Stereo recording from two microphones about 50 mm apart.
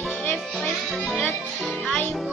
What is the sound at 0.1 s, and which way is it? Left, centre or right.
Music, left.